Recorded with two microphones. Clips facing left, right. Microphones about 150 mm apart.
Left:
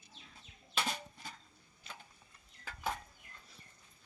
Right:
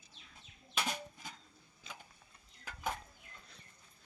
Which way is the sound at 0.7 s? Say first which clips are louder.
Even; 15° right (ahead or behind).